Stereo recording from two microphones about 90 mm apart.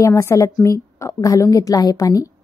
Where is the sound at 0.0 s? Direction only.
35° left (ahead or behind).